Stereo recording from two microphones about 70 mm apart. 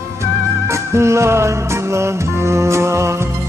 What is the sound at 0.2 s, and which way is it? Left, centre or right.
Music, right.